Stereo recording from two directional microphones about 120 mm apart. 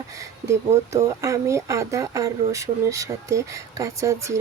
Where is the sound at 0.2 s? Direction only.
25° right (ahead or behind).